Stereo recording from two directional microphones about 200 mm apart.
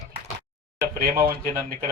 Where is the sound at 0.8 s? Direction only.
45° right (ahead or behind).